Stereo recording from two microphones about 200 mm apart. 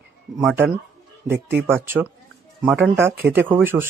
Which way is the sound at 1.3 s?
55° right (ahead or behind).